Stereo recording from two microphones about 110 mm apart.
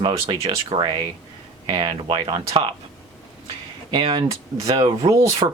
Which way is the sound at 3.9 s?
45° right (ahead or behind).